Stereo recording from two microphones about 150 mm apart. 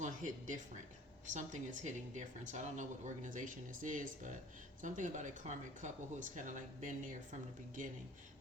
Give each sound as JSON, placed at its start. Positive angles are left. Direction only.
{"t": 0.0, "sound": "speech", "side_deg": -60}